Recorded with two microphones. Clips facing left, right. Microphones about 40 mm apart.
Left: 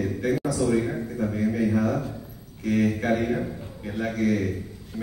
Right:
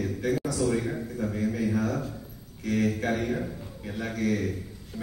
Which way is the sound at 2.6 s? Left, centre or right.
Centre.